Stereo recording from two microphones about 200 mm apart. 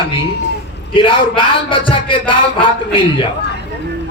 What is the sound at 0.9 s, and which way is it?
Speech, 25° left (ahead or behind).